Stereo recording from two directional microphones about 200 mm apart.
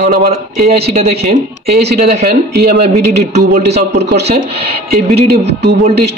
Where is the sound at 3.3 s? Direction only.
35° right (ahead or behind).